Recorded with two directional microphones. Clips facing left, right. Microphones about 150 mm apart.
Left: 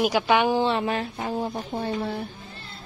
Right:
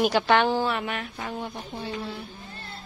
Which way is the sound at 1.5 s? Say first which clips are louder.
Left 6 dB; 50° left (ahead or behind).